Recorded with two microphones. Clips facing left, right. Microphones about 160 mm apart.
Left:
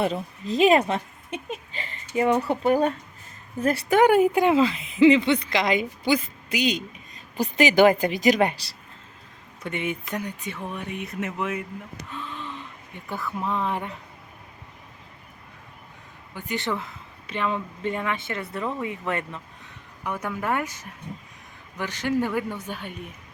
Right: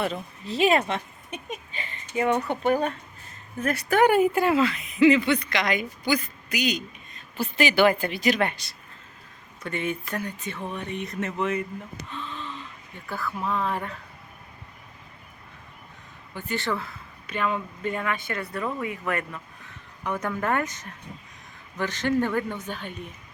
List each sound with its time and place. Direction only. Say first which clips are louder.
0.0 s a woman's voice: left 3 dB; 35° left (ahead or behind)
1.7 s a sound: left 3 dB; 35° left (ahead or behind)
3.6 s speech: left 3 dB; 30° left (ahead or behind)
3.9 s speech: left 2 dB; 15° left (ahead or behind)
9.6 s speech: even; 20° left (ahead or behind)
12.1 s gasp: left 1 dB; 10° left (ahead or behind)
13.1 s speech: left 1 dB; 20° left (ahead or behind)
16.3 s speech: even; 15° left (ahead or behind)
20.1 s speech: right 1 dB; 10° left (ahead or behind)